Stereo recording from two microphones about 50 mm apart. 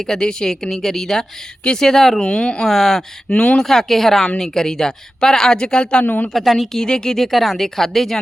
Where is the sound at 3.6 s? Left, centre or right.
Centre.